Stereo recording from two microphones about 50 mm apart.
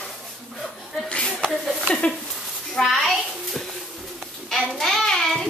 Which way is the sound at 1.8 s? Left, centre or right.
Left.